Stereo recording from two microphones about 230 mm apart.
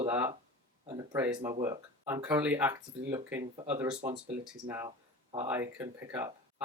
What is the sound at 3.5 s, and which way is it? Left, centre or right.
Speech, right.